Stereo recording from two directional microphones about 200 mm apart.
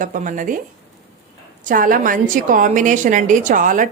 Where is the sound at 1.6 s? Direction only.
45° right (ahead or behind).